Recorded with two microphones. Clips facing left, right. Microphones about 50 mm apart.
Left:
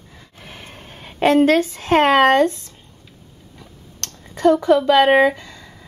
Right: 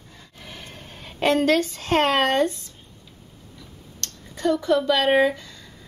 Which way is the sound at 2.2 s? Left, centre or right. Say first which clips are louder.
Left 7 dB; left.